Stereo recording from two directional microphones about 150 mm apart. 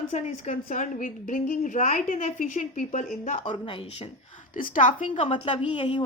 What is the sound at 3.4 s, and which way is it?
Speech, 35° left (ahead or behind).